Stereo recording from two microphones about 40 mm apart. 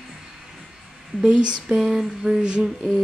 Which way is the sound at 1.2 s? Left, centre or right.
Right.